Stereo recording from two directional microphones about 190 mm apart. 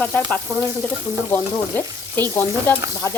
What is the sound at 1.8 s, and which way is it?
Frying, 20° right (ahead or behind).